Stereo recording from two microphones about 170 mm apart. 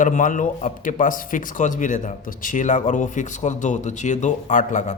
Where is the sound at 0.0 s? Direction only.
50° left (ahead or behind).